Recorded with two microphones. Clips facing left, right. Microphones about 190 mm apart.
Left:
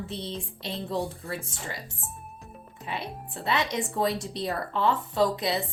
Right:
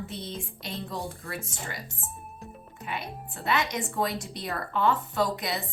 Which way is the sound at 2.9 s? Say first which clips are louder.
Left 1 dB; 30° left (ahead or behind).